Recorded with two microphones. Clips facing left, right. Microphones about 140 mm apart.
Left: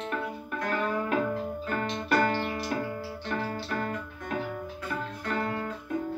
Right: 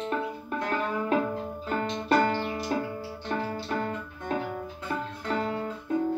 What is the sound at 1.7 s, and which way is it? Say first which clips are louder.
Keyboard: right 3 dB; 25° right (ahead or behind).